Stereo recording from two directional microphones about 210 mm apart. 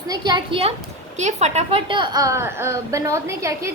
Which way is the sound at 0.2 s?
20° right (ahead or behind).